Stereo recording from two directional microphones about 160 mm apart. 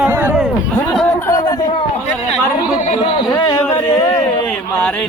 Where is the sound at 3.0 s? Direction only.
30° left (ahead or behind).